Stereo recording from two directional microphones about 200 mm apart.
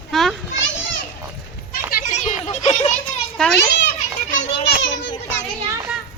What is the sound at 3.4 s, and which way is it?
Children playing, 5° left (ahead or behind).